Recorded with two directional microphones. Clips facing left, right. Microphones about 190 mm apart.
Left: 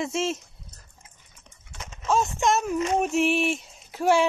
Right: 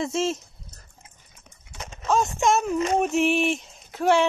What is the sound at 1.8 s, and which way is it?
Horse, 35° right (ahead or behind).